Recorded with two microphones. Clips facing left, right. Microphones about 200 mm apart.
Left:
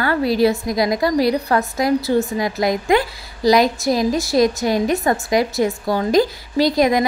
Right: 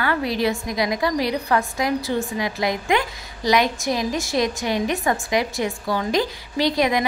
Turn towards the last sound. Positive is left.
turn(degrees=40)  # may be behind; listen again after turning